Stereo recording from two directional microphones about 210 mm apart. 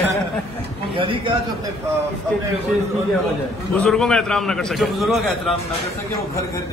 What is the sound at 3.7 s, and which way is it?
A man's voice, centre (ahead or behind).